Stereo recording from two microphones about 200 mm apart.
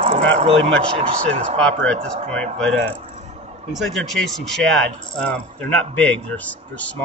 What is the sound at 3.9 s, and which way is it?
Speech, centre (ahead or behind).